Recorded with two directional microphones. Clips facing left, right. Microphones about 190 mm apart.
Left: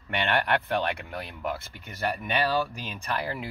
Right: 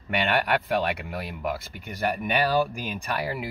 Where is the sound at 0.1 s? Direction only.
10° right (ahead or behind).